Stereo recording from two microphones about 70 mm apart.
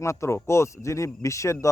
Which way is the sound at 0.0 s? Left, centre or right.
Left.